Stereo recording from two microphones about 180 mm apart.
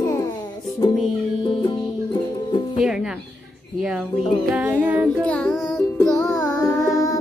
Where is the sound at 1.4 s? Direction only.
25° left (ahead or behind).